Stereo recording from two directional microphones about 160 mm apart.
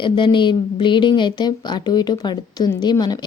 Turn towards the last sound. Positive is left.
turn(degrees=25)  # may be behind; listen again after turning